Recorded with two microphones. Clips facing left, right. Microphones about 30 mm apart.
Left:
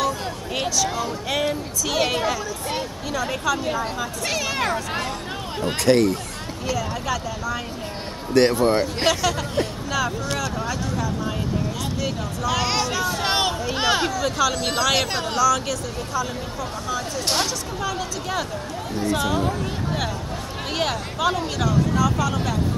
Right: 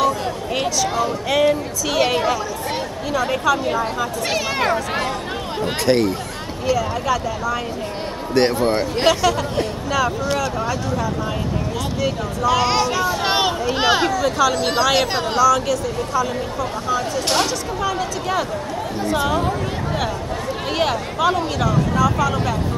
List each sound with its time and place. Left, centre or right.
0.6 s speech: centre
12.0 s speech: centre
20.7 s speech: centre